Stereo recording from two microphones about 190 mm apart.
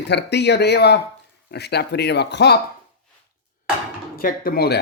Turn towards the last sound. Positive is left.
turn(degrees=55)  # may be behind; listen again after turning